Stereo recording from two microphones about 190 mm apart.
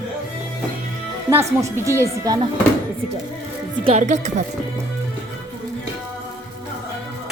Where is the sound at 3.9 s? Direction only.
40° right (ahead or behind).